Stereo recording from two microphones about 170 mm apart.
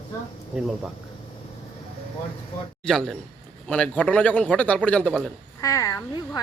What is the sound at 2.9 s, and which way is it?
A man's voice, 5° left (ahead or behind).